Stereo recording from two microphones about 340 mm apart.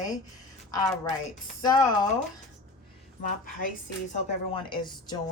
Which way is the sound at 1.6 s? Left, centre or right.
Centre.